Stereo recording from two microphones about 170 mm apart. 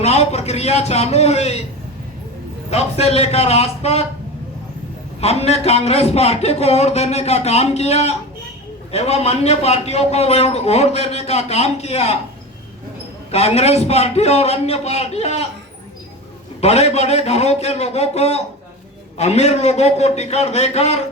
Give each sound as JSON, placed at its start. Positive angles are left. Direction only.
{"t": 0.0, "sound": "a man's voice", "side_deg": 40}
{"t": 2.6, "sound": "a man's voice", "side_deg": 40}
{"t": 5.2, "sound": "a man's voice", "side_deg": 35}
{"t": 13.3, "sound": "a man's voice", "side_deg": 40}
{"t": 16.6, "sound": "a man's voice", "side_deg": 40}